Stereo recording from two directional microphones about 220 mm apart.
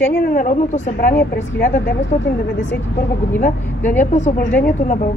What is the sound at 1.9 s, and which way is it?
Speech, 55° left (ahead or behind).